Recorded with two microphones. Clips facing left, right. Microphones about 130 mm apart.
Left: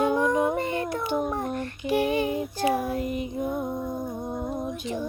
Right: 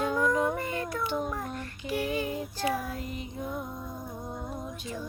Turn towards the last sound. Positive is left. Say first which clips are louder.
# left 7 dB
turn(degrees=25)  # may be behind; listen again after turning